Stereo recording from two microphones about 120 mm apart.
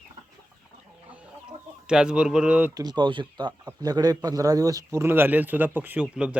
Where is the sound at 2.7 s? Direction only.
35° right (ahead or behind).